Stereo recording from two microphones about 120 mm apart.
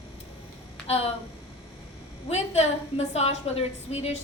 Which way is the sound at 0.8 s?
55° left (ahead or behind).